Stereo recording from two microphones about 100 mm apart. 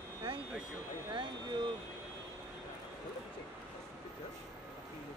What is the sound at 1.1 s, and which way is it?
Speech, 50° right (ahead or behind).